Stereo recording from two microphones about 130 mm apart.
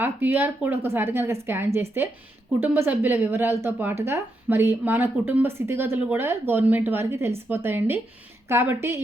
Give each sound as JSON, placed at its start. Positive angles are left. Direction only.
{"t": 0.0, "sound": "a woman's voice", "side_deg": -15}